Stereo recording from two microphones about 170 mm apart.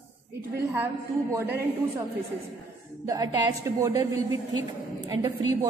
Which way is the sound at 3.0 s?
20° right (ahead or behind).